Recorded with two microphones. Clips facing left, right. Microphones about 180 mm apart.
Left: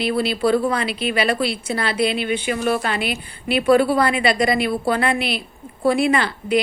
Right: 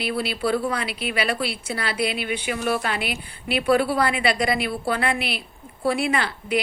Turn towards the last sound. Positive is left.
turn(degrees=-5)  # may be behind; listen again after turning